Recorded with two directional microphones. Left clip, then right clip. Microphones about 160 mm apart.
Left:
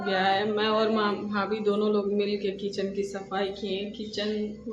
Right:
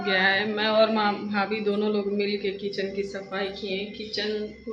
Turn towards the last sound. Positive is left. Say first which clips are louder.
# even
turn(degrees=15)  # may be behind; listen again after turning